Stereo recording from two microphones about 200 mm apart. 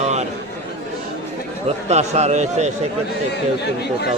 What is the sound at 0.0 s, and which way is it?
Chatter, 35° right (ahead or behind).